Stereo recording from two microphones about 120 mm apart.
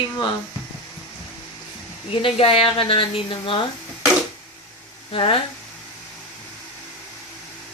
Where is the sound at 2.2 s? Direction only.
50° left (ahead or behind).